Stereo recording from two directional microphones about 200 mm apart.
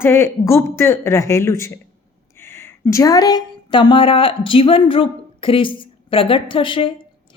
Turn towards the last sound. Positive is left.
turn(degrees=25)  # may be behind; listen again after turning